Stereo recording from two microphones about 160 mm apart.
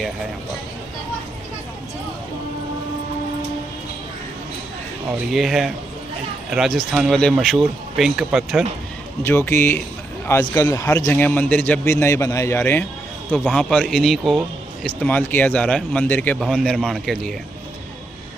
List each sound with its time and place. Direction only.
5.3 s speech: centre (ahead or behind)
9.2 s a man's voice: 15° left (ahead or behind)
13.3 s a man's voice: centre (ahead or behind)